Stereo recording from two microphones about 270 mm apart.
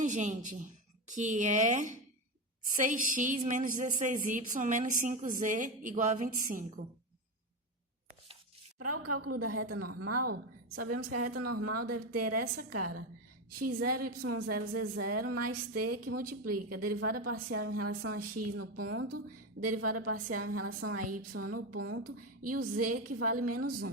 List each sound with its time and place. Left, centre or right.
0.0 s a woman's voice: right
8.8 s a woman's voice: right